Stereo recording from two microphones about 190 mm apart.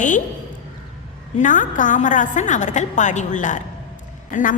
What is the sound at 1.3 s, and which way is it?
A woman's voice, 40° left (ahead or behind).